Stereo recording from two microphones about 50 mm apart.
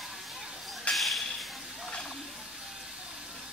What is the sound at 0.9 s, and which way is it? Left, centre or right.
Whip, centre.